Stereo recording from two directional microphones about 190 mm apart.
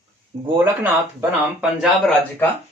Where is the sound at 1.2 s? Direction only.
5° right (ahead or behind).